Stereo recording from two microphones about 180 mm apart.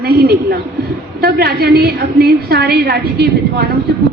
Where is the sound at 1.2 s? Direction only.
60° right (ahead or behind).